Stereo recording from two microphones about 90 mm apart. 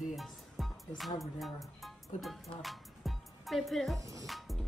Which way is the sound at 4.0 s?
40° right (ahead or behind).